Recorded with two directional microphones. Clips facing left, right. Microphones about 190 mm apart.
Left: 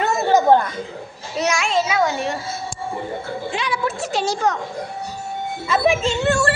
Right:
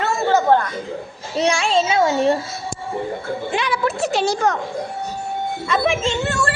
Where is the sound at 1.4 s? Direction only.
30° right (ahead or behind).